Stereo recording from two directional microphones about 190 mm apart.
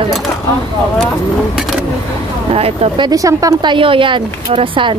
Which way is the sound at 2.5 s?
30° right (ahead or behind).